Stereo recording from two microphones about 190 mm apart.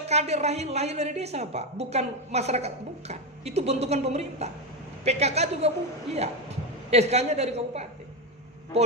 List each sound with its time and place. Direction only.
0.1 s a woman's voice: 35° right (ahead or behind)
6.9 s a woman's voice: 35° right (ahead or behind)